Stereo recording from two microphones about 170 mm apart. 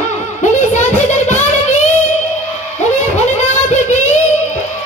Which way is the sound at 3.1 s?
40° left (ahead or behind).